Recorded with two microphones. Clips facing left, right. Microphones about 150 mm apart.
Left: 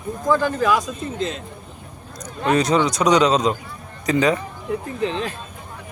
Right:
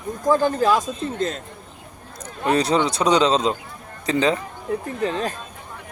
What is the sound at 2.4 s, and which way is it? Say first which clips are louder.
A man's voice: left 1 dB; 30° right (ahead or behind).